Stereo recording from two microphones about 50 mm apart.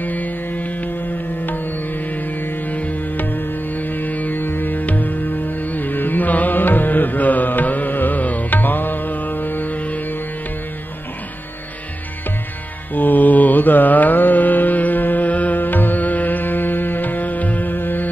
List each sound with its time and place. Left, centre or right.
0.0 s music: left
2.4 s music: left
12.9 s mantra: left